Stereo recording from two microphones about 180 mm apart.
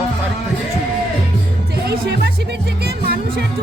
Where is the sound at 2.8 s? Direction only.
60° right (ahead or behind).